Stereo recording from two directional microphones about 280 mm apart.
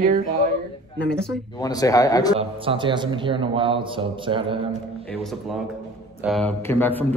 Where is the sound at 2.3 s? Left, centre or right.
Centre.